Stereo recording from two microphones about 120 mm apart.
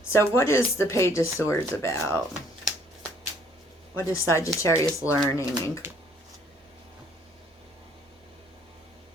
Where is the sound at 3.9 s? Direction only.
20° left (ahead or behind).